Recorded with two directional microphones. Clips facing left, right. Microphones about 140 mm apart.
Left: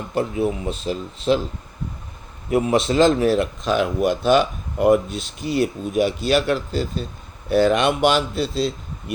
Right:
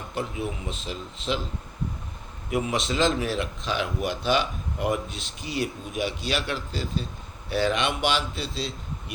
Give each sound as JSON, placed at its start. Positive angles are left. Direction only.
{"t": 0.1, "sound": "speech", "side_deg": 40}
{"t": 2.6, "sound": "speech", "side_deg": 40}